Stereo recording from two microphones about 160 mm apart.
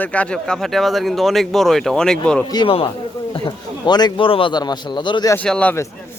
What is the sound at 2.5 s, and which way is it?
A man's voice, 30° left (ahead or behind).